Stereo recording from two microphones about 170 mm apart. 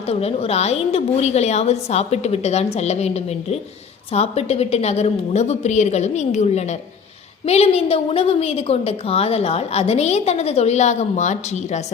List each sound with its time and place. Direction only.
0.1 s a woman's voice: 35° left (ahead or behind)